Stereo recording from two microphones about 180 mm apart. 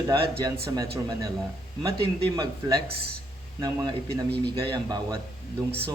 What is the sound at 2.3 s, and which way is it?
A man's voice, 20° right (ahead or behind).